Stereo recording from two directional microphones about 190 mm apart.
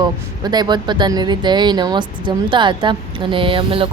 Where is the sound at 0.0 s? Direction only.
20° right (ahead or behind).